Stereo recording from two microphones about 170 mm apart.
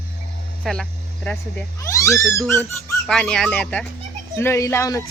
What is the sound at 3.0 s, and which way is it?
Speech, centre (ahead or behind).